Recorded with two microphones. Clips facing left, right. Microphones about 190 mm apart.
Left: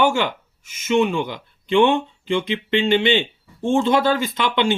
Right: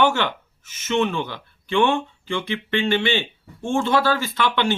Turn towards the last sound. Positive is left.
turn(degrees=15)  # may be behind; listen again after turning